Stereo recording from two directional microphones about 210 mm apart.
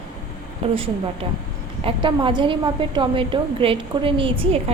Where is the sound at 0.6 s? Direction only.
30° right (ahead or behind).